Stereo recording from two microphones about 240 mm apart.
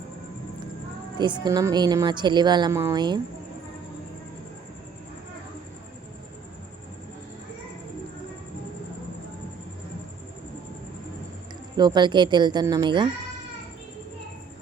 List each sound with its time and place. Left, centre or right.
1.2 s a woman's voice: centre
11.8 s speech: centre